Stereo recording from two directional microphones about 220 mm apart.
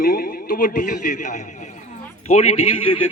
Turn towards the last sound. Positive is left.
turn(degrees=25)  # may be behind; listen again after turning